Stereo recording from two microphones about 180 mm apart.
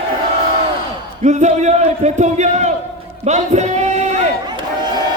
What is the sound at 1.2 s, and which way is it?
A man's voice, 40° right (ahead or behind).